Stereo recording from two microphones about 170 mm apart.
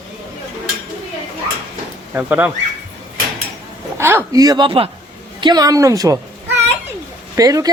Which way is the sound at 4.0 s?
15° right (ahead or behind).